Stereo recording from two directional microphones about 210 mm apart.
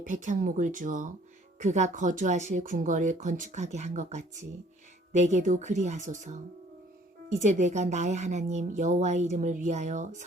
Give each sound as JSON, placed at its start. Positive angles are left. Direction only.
{"t": 0.0, "sound": "speech", "side_deg": -35}